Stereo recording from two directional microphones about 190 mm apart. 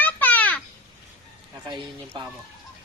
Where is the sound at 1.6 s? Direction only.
25° right (ahead or behind).